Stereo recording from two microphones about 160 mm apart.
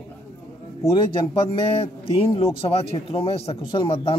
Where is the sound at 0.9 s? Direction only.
35° left (ahead or behind).